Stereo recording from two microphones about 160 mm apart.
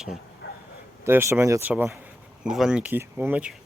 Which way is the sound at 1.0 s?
15° right (ahead or behind).